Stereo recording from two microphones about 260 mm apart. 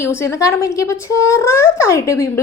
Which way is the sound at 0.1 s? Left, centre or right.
Centre.